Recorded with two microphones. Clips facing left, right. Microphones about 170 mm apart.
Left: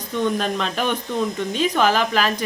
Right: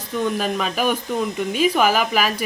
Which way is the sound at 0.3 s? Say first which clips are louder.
Right 1 dB; 5° right (ahead or behind).